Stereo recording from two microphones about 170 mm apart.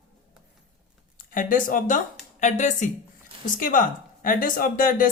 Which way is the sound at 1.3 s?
50° left (ahead or behind).